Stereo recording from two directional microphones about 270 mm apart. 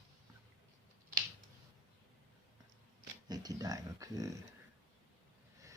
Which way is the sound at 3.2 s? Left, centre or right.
Centre.